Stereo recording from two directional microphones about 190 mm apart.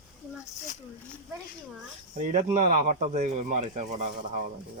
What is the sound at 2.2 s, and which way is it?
Speech, 40° right (ahead or behind).